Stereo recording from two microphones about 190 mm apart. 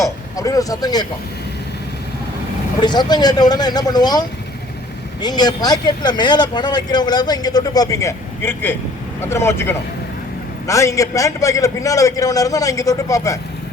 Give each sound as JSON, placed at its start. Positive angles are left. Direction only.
{"t": 0.0, "sound": "speech", "side_deg": 15}
{"t": 2.8, "sound": "speech", "side_deg": 25}
{"t": 5.2, "sound": "a man's voice", "side_deg": 20}